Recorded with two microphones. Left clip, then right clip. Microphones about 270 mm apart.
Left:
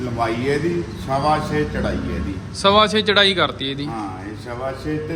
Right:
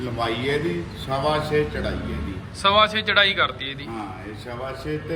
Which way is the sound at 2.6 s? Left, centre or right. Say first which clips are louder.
Left 3 dB; centre.